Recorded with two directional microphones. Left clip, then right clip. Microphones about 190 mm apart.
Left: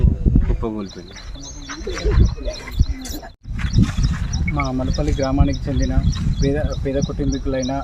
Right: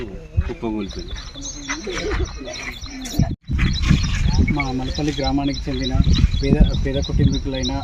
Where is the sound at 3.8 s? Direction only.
40° left (ahead or behind).